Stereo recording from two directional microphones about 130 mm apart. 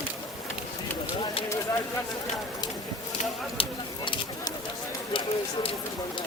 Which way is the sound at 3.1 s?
40° left (ahead or behind).